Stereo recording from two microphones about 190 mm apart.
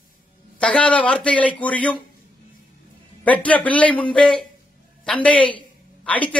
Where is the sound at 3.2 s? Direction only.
10° left (ahead or behind).